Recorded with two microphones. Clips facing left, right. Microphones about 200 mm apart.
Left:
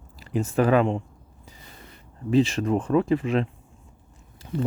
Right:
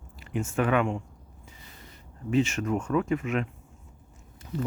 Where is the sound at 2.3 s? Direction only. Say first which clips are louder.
Left 4 dB; 35° left (ahead or behind).